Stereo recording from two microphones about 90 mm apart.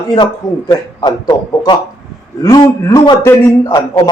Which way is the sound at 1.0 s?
55° left (ahead or behind).